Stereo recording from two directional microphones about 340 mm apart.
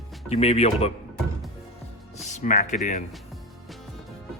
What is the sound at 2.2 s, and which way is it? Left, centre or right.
Speech, left.